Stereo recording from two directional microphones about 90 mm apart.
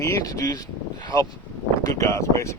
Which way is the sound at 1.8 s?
35° left (ahead or behind).